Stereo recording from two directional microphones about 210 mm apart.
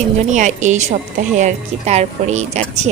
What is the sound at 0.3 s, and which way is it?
Speech, 35° right (ahead or behind).